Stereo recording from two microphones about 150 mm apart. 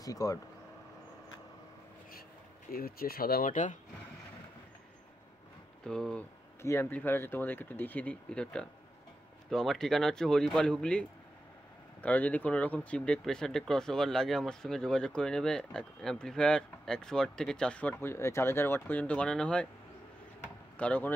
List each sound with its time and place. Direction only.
0.0 s speech: 25° left (ahead or behind)
2.7 s speech: 90° left; by 3.7 s 60° left (ahead or behind)
5.9 s speech: 5° left (ahead or behind)
6.6 s speech: 15° left (ahead or behind)
20.7 s speech: 10° left (ahead or behind)